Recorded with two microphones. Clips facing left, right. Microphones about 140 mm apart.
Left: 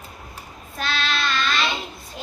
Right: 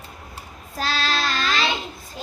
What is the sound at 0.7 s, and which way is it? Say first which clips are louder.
Child singing: right 2 dB; 35° right (ahead or behind).